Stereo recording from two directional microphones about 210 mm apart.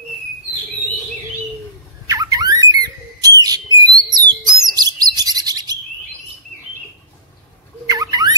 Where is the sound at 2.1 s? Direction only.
15° right (ahead or behind).